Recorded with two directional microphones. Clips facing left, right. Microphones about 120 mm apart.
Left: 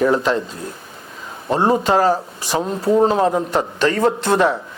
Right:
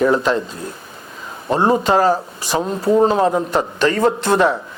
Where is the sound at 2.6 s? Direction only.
40° right (ahead or behind).